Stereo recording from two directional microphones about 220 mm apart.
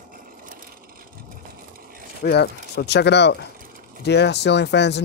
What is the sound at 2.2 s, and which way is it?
Speech, 50° left (ahead or behind).